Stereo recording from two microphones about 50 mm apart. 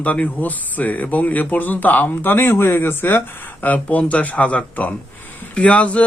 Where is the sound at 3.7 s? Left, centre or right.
Left.